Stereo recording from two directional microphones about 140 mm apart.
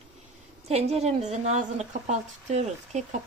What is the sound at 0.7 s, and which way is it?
A woman's voice, 50° right (ahead or behind).